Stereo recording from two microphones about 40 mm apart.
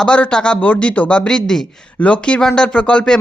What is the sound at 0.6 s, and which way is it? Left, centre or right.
Speech, left.